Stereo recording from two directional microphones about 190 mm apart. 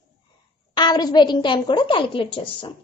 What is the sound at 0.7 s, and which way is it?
A child's voice, 20° left (ahead or behind).